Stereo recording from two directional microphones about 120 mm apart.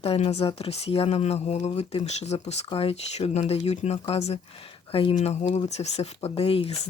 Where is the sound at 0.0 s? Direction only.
55° left (ahead or behind).